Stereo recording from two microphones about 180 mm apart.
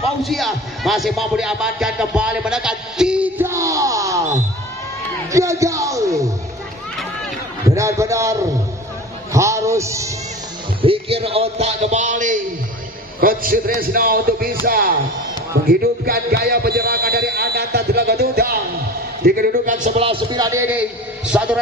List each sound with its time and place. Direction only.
0.2 s speech: centre (ahead or behind); by 6.3 s 15° right (ahead or behind)
7.6 s speech: 15° right (ahead or behind)
10.8 s a man's voice: 30° right (ahead or behind); by 21.5 s 10° right (ahead or behind)